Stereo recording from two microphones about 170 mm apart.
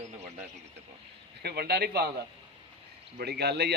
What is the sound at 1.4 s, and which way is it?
Speech, 70° right (ahead or behind).